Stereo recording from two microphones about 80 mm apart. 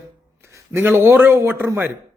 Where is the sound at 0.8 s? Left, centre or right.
Right.